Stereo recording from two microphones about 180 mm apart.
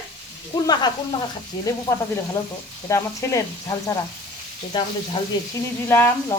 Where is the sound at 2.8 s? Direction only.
15° left (ahead or behind).